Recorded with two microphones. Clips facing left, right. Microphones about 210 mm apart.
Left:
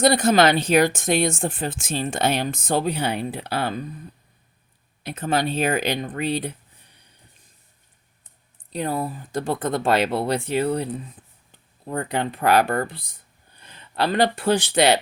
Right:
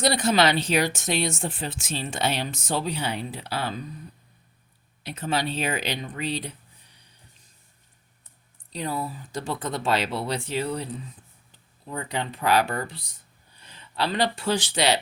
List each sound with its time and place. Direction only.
0.0 s speech: 50° left (ahead or behind)
5.0 s speech: 50° left (ahead or behind)
8.7 s speech: 55° left (ahead or behind)